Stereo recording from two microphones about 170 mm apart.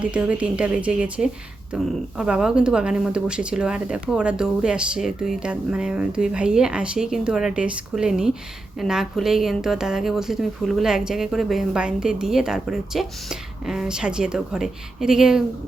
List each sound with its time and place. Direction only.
0.0 s speech: 5° right (ahead or behind)